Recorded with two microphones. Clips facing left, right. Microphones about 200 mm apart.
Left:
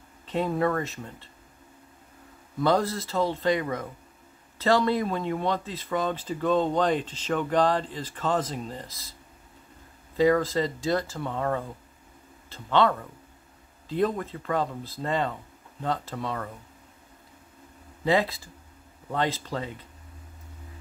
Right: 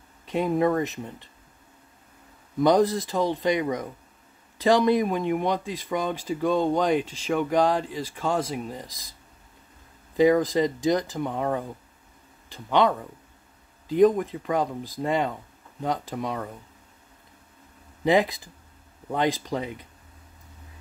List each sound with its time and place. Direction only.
0.3 s speech: 15° right (ahead or behind)
2.6 s speech: 15° right (ahead or behind)
10.1 s speech: 15° right (ahead or behind)
18.0 s speech: 15° right (ahead or behind)